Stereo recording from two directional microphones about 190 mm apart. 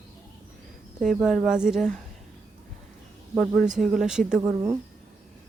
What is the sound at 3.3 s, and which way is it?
Speech, centre (ahead or behind).